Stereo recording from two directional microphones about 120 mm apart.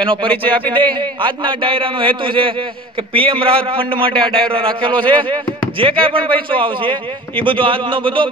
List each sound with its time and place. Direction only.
0.0 s a man's voice: 45° right (ahead or behind)
0.3 s speech: 10° left (ahead or behind)
0.7 s a man's voice: 40° right (ahead or behind)